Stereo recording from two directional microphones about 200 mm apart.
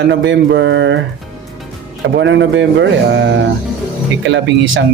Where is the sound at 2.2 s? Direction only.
65° right (ahead or behind).